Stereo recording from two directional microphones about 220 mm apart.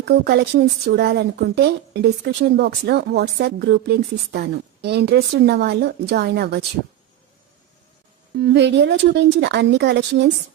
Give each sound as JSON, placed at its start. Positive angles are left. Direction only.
{"t": 0.0, "sound": "speech", "side_deg": -50}
{"t": 8.4, "sound": "speech", "side_deg": -50}